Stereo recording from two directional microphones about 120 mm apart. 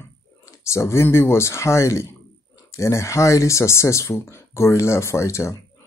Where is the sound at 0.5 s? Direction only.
25° left (ahead or behind).